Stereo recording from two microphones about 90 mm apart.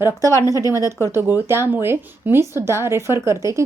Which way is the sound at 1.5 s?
25° right (ahead or behind).